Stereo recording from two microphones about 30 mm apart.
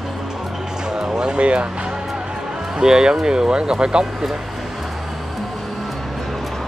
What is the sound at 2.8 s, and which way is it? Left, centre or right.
Speech, right.